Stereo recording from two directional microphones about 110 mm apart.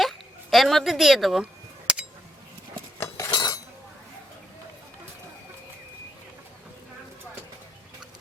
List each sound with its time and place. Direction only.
0.0 s a sound: centre (ahead or behind)
3.0 s cutlery: 25° left (ahead or behind)
3.3 s cutlery: 35° left (ahead or behind)